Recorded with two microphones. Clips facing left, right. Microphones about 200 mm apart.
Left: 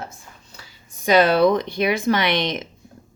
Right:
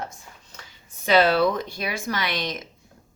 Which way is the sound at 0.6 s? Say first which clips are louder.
Left 1 dB; 15° left (ahead or behind).